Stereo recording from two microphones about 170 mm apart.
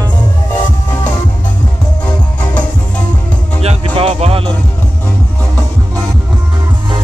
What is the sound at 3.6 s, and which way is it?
Music, 35° right (ahead or behind).